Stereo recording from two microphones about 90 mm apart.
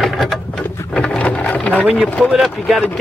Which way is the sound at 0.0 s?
Centre (ahead or behind).